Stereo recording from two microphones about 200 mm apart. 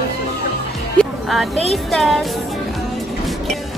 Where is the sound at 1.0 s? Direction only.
Centre (ahead or behind).